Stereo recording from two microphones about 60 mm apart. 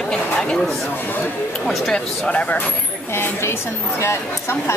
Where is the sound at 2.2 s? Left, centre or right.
Centre.